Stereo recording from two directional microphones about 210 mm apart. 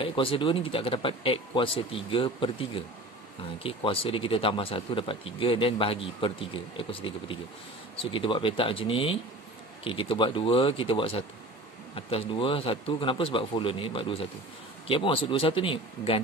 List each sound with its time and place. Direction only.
0.0 s speech: 25° left (ahead or behind)